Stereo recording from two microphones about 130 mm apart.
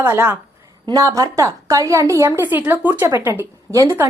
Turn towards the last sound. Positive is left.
turn(degrees=-20)  # may be behind; listen again after turning